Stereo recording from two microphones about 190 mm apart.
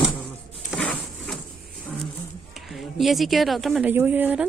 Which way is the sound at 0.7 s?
5° left (ahead or behind).